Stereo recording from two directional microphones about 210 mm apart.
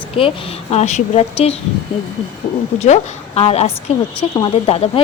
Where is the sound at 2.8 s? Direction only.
30° left (ahead or behind).